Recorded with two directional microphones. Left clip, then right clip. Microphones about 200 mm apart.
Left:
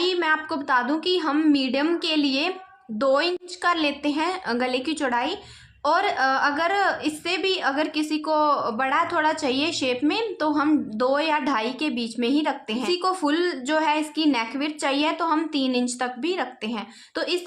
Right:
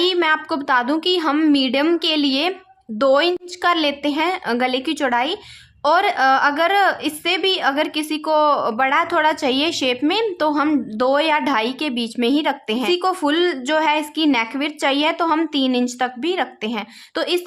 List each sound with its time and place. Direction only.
0.0 s a woman's voice: 30° right (ahead or behind)